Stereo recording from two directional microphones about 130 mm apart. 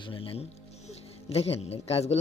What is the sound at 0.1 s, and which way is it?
Speech, 45° left (ahead or behind).